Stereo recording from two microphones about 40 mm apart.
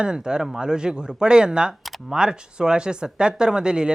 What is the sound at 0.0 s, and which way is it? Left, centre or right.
Speech, centre.